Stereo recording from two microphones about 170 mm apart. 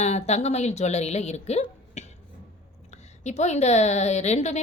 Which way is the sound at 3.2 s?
40° left (ahead or behind).